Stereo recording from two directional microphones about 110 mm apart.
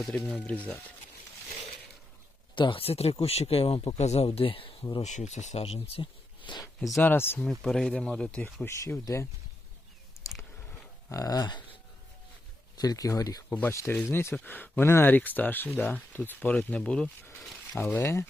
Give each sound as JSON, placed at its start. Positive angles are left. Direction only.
{"t": 0.3, "sound": "speech", "side_deg": 10}
{"t": 2.6, "sound": "speech", "side_deg": 50}
{"t": 4.3, "sound": "speech", "side_deg": 55}
{"t": 5.0, "sound": "speech", "side_deg": 90}
{"t": 6.4, "sound": "a sound", "side_deg": 45}
{"t": 6.7, "sound": "speech", "side_deg": 0}
{"t": 7.0, "sound": "speech", "side_deg": 20}
{"t": 7.6, "sound": "speech", "side_deg": 5}
{"t": 8.6, "sound": "speech", "side_deg": 25}
{"t": 10.2, "sound": "a sound", "side_deg": 25}
{"t": 11.1, "sound": "speech", "side_deg": 35}
{"t": 12.7, "sound": "speech", "side_deg": 35}
{"t": 13.5, "sound": "speech", "side_deg": 20}